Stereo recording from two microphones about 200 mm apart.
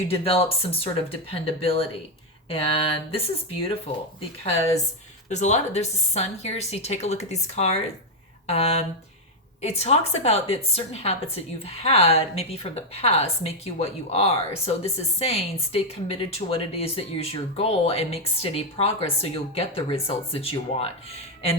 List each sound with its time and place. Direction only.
0.1 s speech: 30° left (ahead or behind)
5.3 s a woman's voice: 35° left (ahead or behind)